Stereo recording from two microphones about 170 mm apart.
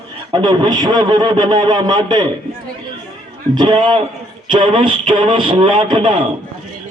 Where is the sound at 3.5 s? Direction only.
25° right (ahead or behind).